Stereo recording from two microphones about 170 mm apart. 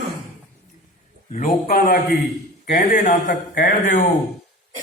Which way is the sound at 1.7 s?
60° left (ahead or behind).